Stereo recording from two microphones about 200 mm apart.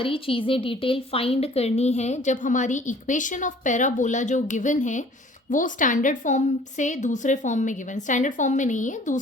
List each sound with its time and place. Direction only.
0.0 s speech: 25° left (ahead or behind)